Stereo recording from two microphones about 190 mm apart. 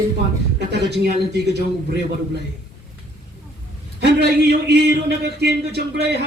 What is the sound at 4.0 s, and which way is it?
A man's voice, 60° right (ahead or behind).